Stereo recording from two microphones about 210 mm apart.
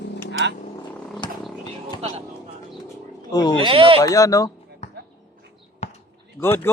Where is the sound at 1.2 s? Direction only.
20° left (ahead or behind).